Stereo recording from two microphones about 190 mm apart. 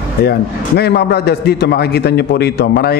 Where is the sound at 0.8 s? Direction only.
60° left (ahead or behind).